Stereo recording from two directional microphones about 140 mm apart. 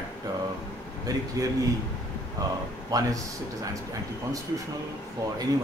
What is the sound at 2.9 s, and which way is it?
Speech, 25° right (ahead or behind).